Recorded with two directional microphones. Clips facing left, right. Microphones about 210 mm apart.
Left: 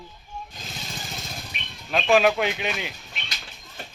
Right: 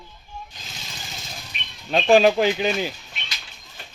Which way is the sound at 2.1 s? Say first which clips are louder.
Right 4 dB; 30° right (ahead or behind).